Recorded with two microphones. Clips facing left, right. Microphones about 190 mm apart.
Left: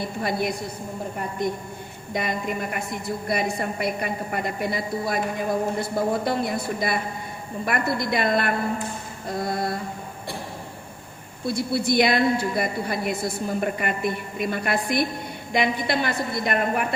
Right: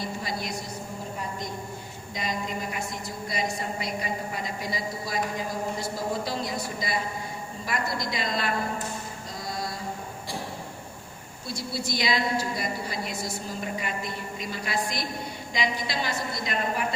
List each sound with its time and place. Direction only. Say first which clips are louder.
0.0 s a woman's voice: left 7 dB; 60° left (ahead or behind)
2.1 s a woman's voice: left 5 dB; 60° left (ahead or behind)
11.4 s a woman's voice: left 9 dB; 60° left (ahead or behind)